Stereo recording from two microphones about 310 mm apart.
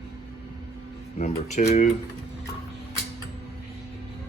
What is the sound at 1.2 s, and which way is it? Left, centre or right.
Speech, left.